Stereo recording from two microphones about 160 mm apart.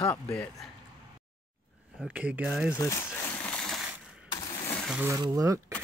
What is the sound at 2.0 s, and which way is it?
Speech, 10° right (ahead or behind).